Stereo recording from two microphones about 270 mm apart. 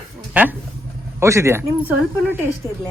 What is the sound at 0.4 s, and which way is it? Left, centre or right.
Speech, centre.